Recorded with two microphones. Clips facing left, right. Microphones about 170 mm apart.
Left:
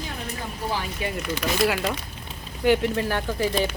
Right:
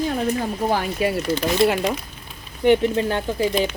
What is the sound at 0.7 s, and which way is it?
Speech, 45° right (ahead or behind).